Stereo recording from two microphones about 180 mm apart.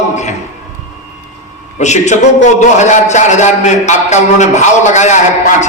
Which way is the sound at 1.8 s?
40° left (ahead or behind).